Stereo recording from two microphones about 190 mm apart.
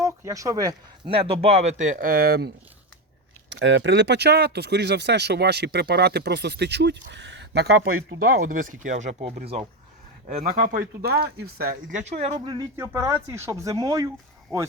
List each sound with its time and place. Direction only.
0.0 s speech: 15° right (ahead or behind); by 2.5 s 55° right (ahead or behind)
3.5 s speech: 70° right (ahead or behind)
8.2 s speech: 45° right (ahead or behind)
10.5 s speech: 50° right (ahead or behind); by 12.5 s 35° right (ahead or behind)
12.5 s speech: 15° right (ahead or behind)